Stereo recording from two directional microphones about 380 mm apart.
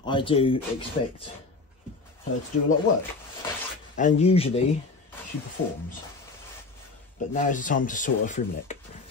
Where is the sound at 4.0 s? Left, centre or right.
Centre.